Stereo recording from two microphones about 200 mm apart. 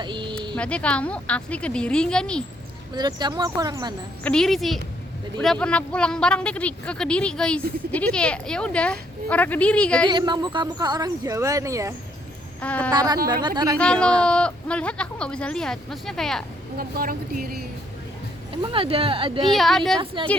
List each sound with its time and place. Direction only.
0.0 s speech: 25° right (ahead or behind)
0.5 s speech: 5° left (ahead or behind)
2.9 s speech: 20° right (ahead or behind)
4.2 s speech: 5° left (ahead or behind)
10.1 s speech: 20° right (ahead or behind)
12.6 s a woman's voice: 5° left (ahead or behind)
12.9 s speech: 20° right (ahead or behind)
13.7 s speech: 5° left (ahead or behind)
16.7 s speech: 45° right (ahead or behind)
18.5 s speech: 25° right (ahead or behind)
19.5 s speech: centre (ahead or behind)